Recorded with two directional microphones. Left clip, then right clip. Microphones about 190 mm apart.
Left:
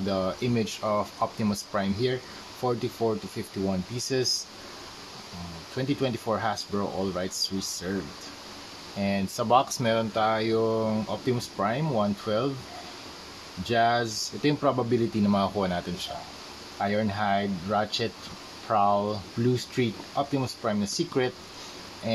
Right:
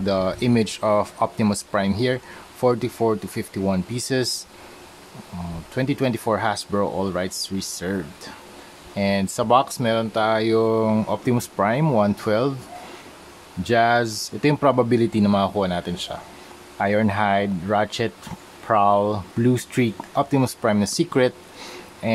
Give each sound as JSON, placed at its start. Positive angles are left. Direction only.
{"t": 0.0, "sound": "speech", "side_deg": -35}
{"t": 5.8, "sound": "speech", "side_deg": -35}
{"t": 13.7, "sound": "speech", "side_deg": -35}